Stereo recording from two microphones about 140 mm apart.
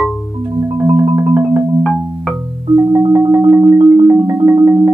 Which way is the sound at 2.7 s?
25° right (ahead or behind).